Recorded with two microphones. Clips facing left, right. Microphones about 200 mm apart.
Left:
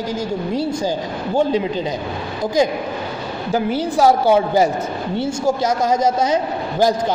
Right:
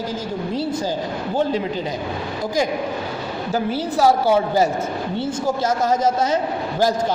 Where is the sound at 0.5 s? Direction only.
15° left (ahead or behind).